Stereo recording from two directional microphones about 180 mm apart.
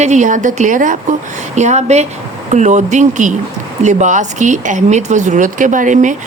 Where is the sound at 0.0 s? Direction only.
40° right (ahead or behind).